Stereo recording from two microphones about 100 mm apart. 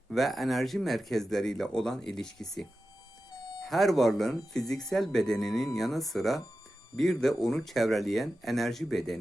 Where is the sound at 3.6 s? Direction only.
Centre (ahead or behind).